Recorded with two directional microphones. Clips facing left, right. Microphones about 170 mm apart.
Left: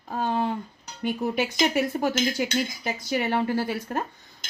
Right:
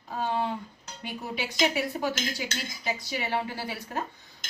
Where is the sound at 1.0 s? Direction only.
50° left (ahead or behind).